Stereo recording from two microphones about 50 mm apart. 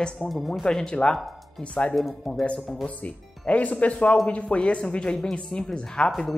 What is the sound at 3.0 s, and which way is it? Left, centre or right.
Speech, left.